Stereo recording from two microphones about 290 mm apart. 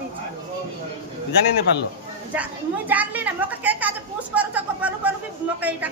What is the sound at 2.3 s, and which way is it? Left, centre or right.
A woman's voice, centre.